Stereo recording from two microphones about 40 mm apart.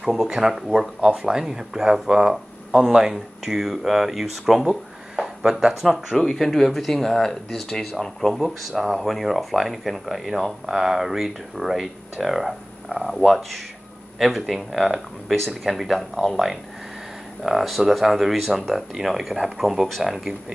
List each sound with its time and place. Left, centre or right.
0.0 s speech: centre
4.6 s a sound: centre
5.8 s speech: centre
6.1 s speech: centre
17.4 s speech: centre